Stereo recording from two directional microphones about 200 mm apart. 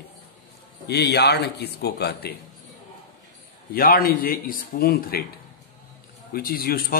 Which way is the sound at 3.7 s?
45° left (ahead or behind).